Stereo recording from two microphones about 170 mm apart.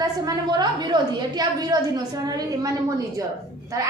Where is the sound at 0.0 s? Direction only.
25° right (ahead or behind).